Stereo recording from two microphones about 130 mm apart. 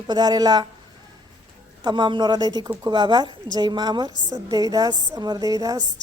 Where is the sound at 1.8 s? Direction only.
35° right (ahead or behind).